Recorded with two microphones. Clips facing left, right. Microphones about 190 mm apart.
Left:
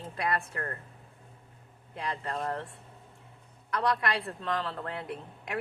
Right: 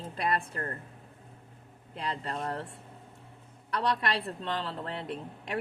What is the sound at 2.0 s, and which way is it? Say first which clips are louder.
Speech: left 1 dB; 30° right (ahead or behind).